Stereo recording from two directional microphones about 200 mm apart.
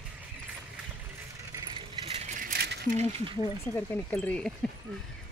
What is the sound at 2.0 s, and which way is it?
Rattle, 30° right (ahead or behind).